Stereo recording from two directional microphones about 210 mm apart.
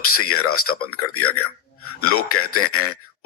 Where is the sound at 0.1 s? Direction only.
90° left.